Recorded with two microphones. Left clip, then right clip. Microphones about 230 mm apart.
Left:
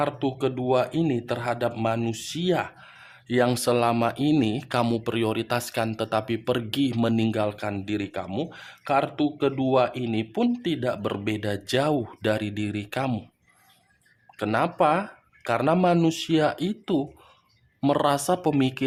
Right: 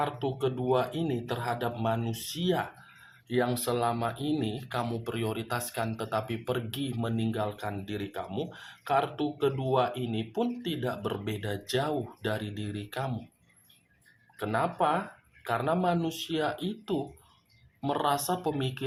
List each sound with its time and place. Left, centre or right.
0.0 s speech: left
14.3 s speech: left